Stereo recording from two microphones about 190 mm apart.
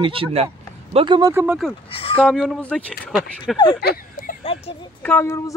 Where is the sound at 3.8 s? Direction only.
55° left (ahead or behind).